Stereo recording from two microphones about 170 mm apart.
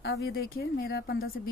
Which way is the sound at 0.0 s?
80° left.